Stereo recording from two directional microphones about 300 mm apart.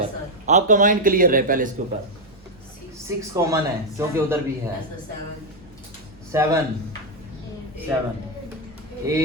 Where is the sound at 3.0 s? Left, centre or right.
Centre.